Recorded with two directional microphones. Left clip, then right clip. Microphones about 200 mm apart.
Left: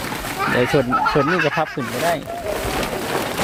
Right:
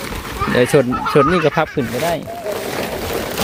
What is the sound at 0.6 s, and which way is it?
Speech, 35° right (ahead or behind).